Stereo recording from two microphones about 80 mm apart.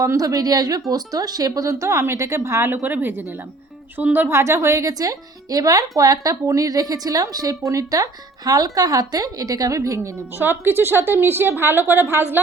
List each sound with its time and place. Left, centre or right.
0.0 s a woman's voice: right
4.3 s speech: right
10.3 s a woman's voice: right